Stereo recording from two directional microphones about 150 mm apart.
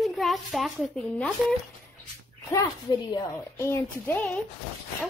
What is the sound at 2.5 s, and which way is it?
A child's voice, 25° left (ahead or behind).